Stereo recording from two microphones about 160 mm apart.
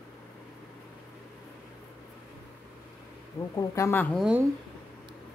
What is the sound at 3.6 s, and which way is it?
Speech, 20° left (ahead or behind).